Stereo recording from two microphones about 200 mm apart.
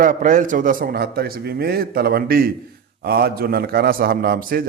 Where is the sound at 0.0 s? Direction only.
40° right (ahead or behind).